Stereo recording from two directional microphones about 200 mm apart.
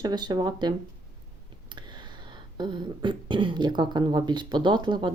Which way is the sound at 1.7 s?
20° right (ahead or behind).